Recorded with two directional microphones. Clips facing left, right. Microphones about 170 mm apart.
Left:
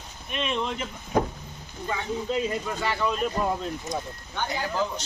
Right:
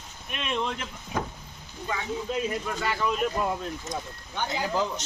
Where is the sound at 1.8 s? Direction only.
Centre (ahead or behind).